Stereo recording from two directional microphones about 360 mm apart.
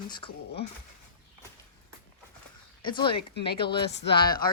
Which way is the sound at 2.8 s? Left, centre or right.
Centre.